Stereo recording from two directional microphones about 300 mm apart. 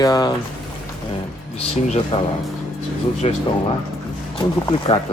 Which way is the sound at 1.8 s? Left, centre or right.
Left.